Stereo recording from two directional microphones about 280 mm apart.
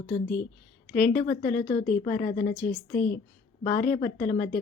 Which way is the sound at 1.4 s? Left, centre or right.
Left.